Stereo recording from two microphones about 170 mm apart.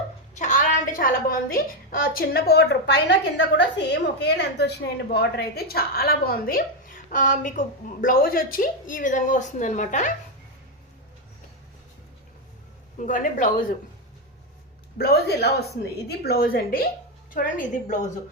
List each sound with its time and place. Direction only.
0.3 s a woman's voice: 50° left (ahead or behind); by 4.7 s 85° left
5.1 s a woman's voice: 70° left (ahead or behind); by 10.1 s 45° left (ahead or behind)
13.0 s a woman's voice: 50° left (ahead or behind)
14.9 s a woman's voice: 65° left (ahead or behind)
17.3 s a woman's voice: 45° left (ahead or behind)